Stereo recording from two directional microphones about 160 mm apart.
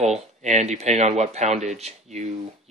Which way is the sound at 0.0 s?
45° right (ahead or behind).